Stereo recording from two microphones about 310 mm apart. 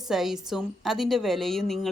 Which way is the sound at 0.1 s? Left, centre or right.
Centre.